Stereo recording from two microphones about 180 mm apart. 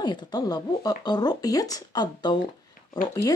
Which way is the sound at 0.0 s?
25° left (ahead or behind).